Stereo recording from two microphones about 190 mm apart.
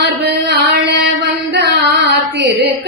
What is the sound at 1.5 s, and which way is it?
Carnatic music, 65° right (ahead or behind).